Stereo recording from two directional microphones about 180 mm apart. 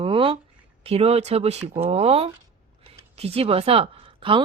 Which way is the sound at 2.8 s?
35° right (ahead or behind).